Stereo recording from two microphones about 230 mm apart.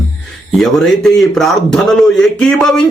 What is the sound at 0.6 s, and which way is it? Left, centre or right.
Speech, centre.